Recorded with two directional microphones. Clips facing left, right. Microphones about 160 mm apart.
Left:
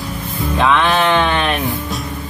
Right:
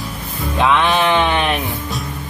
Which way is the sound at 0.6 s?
10° right (ahead or behind).